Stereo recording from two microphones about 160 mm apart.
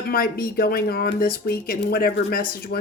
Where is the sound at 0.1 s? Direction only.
70° left (ahead or behind).